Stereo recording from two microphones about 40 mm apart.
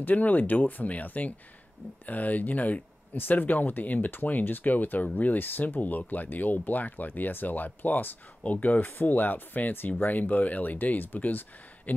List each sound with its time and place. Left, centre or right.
0.0 s speech: left